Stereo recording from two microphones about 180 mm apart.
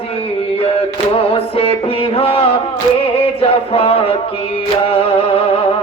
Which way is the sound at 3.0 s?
30° left (ahead or behind).